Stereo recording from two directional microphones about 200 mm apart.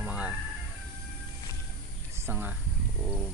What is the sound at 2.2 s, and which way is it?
Speech, 10° right (ahead or behind).